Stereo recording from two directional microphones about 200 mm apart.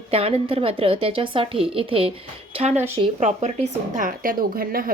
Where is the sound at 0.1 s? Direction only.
30° right (ahead or behind).